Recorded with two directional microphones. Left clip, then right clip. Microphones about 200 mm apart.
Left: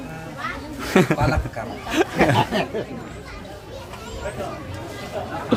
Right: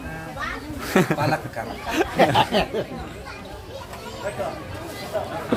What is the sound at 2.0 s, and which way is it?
Chuckle, 15° left (ahead or behind).